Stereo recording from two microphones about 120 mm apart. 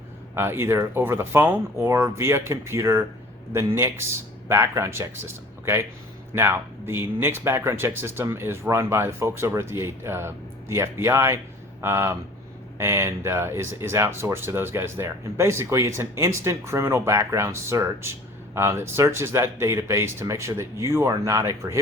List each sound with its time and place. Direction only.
0.3 s speech: 20° right (ahead or behind)
6.3 s speech: 20° right (ahead or behind)